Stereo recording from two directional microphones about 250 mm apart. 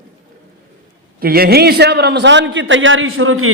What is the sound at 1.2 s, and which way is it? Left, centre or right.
A man's voice, right.